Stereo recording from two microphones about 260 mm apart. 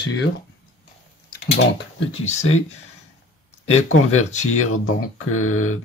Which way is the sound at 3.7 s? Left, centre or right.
Left.